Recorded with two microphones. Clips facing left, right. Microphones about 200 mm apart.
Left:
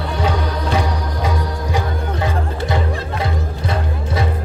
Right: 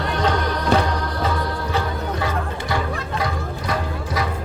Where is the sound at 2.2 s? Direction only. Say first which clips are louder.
Left 3 dB; 20° left (ahead or behind).